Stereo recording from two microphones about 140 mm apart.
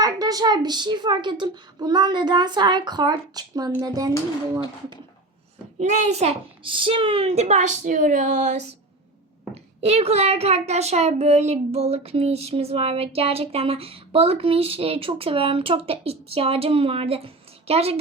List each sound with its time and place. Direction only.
0.0 s a woman's voice: 25° right (ahead or behind)
5.8 s a child's voice: 55° right (ahead or behind)
9.8 s a woman's voice: 50° right (ahead or behind)